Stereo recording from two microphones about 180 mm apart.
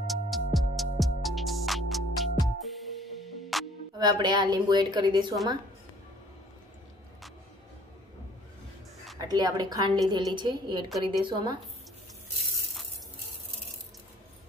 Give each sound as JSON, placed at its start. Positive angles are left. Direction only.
{"t": 0.0, "sound": "music", "side_deg": 0}
{"t": 4.0, "sound": "a woman's voice", "side_deg": -25}
{"t": 9.2, "sound": "a woman's voice", "side_deg": -20}